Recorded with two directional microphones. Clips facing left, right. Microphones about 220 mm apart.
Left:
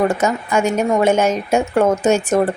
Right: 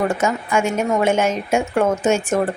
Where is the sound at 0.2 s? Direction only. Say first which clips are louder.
Left 2 dB; 40° left (ahead or behind).